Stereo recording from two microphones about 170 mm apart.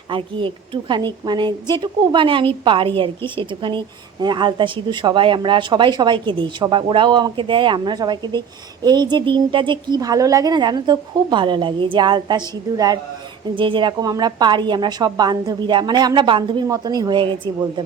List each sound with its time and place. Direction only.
0.1 s a woman's voice: 30° right (ahead or behind)